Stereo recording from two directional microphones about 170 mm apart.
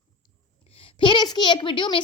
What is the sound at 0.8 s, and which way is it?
A child's voice, 25° left (ahead or behind).